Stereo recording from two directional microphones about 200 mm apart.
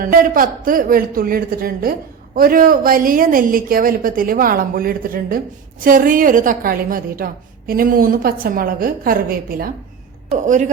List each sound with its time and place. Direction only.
0.0 s a woman's voice: 45° right (ahead or behind)